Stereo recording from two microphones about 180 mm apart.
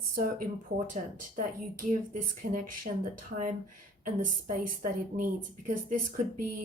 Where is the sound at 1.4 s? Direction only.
45° right (ahead or behind).